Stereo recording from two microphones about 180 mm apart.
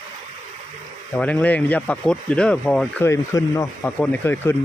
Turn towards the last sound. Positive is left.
turn(degrees=10)  # may be behind; listen again after turning